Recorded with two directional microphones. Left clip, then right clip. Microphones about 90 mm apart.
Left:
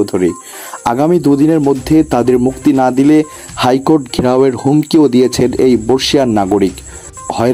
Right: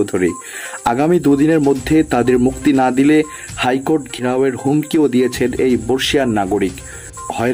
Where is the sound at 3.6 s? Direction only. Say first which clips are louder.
Left 5 dB; 60° left (ahead or behind).